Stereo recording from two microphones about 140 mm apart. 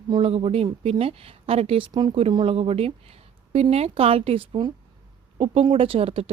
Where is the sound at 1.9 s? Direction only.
30° right (ahead or behind).